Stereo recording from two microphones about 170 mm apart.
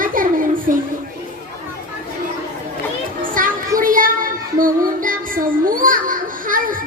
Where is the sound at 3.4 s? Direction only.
55° right (ahead or behind).